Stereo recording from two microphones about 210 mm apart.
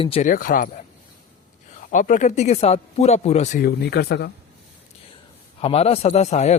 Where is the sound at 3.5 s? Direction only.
50° left (ahead or behind).